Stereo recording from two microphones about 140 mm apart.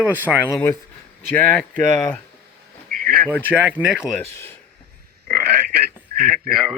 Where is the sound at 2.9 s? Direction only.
85° right.